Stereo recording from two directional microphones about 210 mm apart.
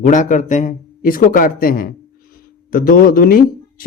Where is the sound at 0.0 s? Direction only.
35° left (ahead or behind).